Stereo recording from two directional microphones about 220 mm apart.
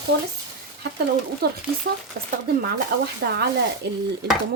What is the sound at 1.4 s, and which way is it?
Speech, 45° right (ahead or behind).